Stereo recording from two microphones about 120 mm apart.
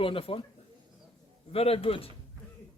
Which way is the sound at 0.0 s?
50° left (ahead or behind).